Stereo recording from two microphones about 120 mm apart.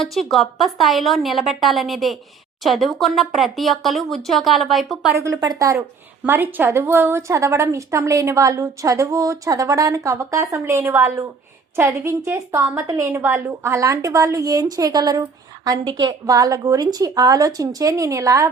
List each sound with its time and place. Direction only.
0.0 s speech: centre (ahead or behind)
5.1 s a woman's voice: 30° right (ahead or behind)
6.2 s a woman's voice: 15° right (ahead or behind)